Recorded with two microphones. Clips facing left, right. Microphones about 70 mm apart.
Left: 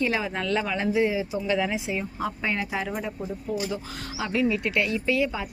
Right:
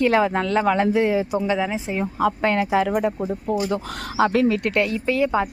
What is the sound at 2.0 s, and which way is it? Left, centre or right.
Speech, right.